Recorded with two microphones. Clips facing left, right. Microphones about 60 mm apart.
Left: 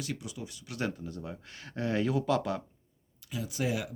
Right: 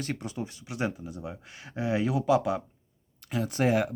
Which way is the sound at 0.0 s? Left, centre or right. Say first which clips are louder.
Right 5 dB; right.